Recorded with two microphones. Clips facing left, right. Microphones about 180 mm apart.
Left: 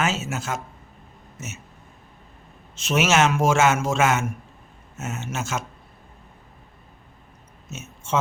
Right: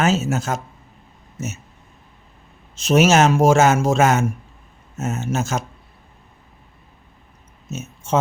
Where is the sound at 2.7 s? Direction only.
40° right (ahead or behind).